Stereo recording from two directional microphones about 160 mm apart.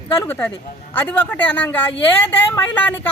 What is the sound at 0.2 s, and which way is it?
Speech, 10° left (ahead or behind).